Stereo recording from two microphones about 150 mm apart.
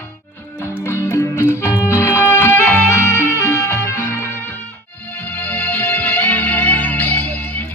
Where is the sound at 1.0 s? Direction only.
20° left (ahead or behind).